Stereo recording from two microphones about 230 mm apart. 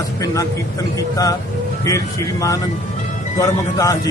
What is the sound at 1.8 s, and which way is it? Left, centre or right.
A man's voice, centre.